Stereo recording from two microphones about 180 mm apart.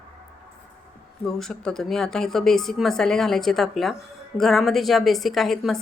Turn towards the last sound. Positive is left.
turn(degrees=0)  # may be behind; listen again after turning